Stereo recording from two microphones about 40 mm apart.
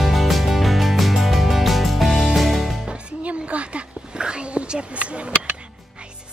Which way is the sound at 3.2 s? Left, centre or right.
Right.